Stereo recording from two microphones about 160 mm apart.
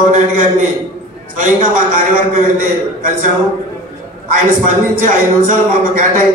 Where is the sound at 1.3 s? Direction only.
55° right (ahead or behind).